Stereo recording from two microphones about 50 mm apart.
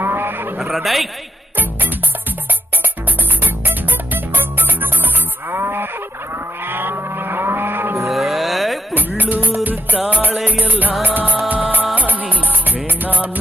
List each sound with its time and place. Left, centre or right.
0.0 s a sound: right
0.7 s a man's voice: centre
3.4 s music: right
5.5 s a sound: right
6.7 s vehicle: right
8.0 s music: centre
9.0 s music: right